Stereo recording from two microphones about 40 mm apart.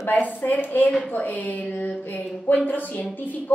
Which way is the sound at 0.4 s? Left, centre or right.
Left.